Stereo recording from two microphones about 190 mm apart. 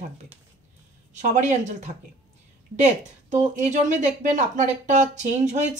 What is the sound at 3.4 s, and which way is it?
Speech, 40° right (ahead or behind).